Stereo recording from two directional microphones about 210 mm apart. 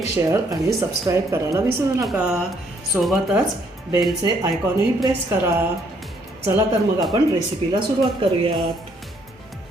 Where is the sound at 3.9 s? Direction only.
15° right (ahead or behind).